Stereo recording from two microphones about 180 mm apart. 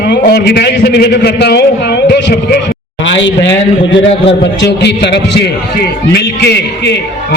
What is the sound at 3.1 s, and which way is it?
Speech, 90° left.